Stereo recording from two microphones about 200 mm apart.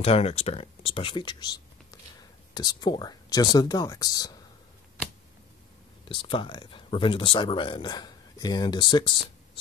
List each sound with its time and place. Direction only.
0.0 s speech: 30° left (ahead or behind)
6.0 s speech: 25° left (ahead or behind)